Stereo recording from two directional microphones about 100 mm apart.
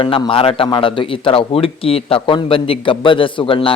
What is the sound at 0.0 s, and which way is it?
Speech, 65° left (ahead or behind).